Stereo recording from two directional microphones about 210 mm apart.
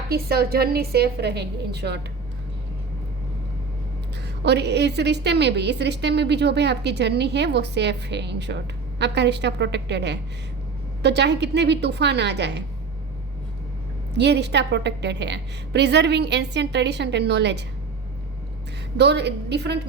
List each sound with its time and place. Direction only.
0.1 s a woman's voice: 45° right (ahead or behind)
4.4 s a woman's voice: 55° right (ahead or behind)
14.1 s a woman's voice: 55° right (ahead or behind)
18.9 s a woman's voice: 55° right (ahead or behind)